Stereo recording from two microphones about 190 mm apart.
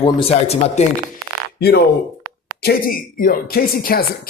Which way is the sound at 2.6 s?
50° left (ahead or behind).